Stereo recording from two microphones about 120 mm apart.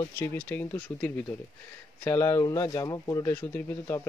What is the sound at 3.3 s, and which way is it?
Speech, 15° left (ahead or behind).